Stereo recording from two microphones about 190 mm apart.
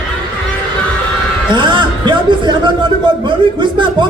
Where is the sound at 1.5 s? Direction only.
25° right (ahead or behind).